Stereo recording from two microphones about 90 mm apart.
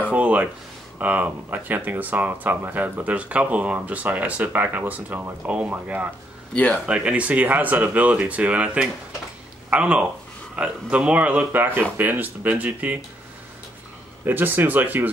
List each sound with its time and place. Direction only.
0.1 s a sound: 15° right (ahead or behind)
0.9 s speech: 15° right (ahead or behind)
6.5 s speech: 15° left (ahead or behind)
6.9 s speech: 15° right (ahead or behind)
14.2 s speech: 20° right (ahead or behind)